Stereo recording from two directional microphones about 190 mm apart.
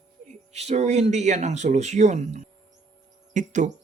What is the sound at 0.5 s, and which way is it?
Speech, 35° right (ahead or behind).